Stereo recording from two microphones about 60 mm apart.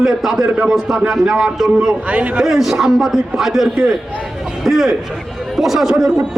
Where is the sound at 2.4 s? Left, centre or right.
Centre.